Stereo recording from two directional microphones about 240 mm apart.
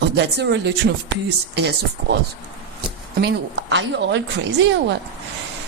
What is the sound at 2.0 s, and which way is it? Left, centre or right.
Speech, right.